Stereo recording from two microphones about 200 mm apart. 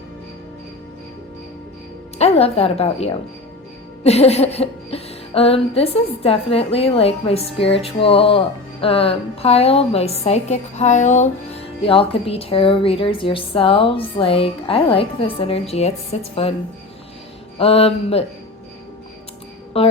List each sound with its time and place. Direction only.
2.1 s music: 30° left (ahead or behind)
16.1 s a woman's voice: 30° left (ahead or behind)
17.6 s music: 30° left (ahead or behind)
19.7 s music: 30° left (ahead or behind)